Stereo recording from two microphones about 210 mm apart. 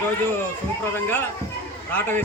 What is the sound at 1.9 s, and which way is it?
Speech, 10° left (ahead or behind).